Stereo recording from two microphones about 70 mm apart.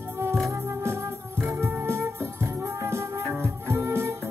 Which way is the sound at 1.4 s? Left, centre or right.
Right.